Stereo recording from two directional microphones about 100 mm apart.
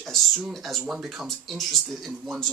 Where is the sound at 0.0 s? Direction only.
Centre (ahead or behind).